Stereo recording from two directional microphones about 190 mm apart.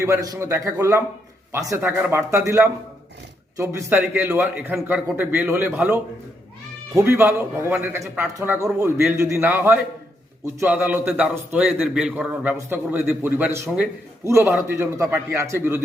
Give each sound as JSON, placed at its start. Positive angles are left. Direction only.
{"t": 0.0, "sound": "a man's voice", "side_deg": -15}
{"t": 3.6, "sound": "a man's voice", "side_deg": -15}
{"t": 4.4, "sound": "a man's voice", "side_deg": 0}